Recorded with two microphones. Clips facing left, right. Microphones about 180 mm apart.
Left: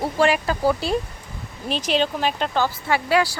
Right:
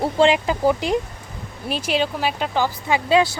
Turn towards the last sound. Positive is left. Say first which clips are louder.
# right 2 dB
turn(degrees=-20)  # may be behind; listen again after turning